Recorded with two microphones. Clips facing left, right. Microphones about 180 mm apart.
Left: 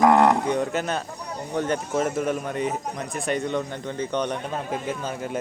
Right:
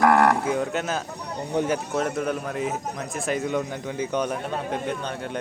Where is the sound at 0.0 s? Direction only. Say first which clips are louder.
Left 1 dB; 20° left (ahead or behind).